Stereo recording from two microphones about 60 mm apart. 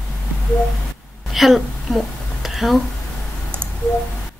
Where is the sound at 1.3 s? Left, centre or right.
Centre.